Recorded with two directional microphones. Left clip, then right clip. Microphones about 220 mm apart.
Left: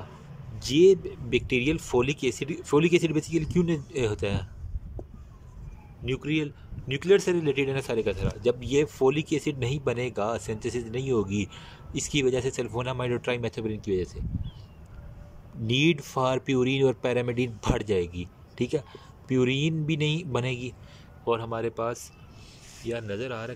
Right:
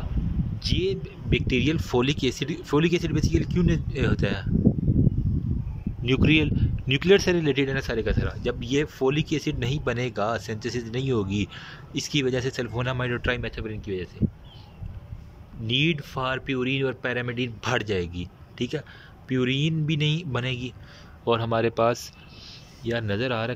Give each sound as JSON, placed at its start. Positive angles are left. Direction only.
{"t": 0.6, "sound": "speech", "side_deg": 30}
{"t": 1.5, "sound": "speech", "side_deg": 15}
{"t": 6.0, "sound": "speech", "side_deg": 0}
{"t": 15.6, "sound": "speech", "side_deg": 25}
{"t": 21.2, "sound": "speech", "side_deg": 10}